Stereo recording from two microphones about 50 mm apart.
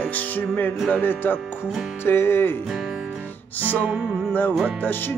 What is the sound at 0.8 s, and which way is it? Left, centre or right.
Speech, left.